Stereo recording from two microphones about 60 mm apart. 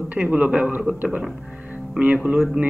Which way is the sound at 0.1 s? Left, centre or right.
Right.